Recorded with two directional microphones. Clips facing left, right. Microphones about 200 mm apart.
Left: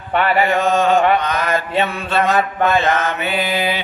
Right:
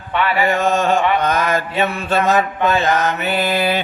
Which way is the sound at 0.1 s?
45° left (ahead or behind).